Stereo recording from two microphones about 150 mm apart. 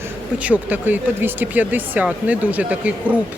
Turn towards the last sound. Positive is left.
turn(degrees=-10)  # may be behind; listen again after turning